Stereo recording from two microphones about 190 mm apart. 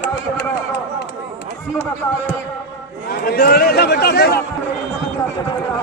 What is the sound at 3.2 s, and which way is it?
A man's voice, 55° left (ahead or behind).